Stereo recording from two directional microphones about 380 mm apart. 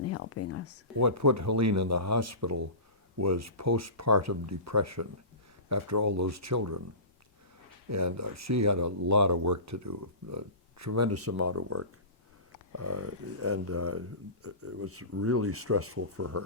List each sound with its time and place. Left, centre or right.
0.0 s a sound: left
0.9 s speech: right
7.9 s speech: right